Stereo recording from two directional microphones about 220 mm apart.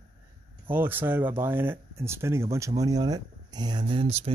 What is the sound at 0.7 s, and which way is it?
Speech, 10° right (ahead or behind).